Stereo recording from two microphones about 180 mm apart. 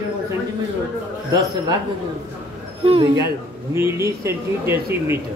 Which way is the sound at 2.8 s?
30° right (ahead or behind).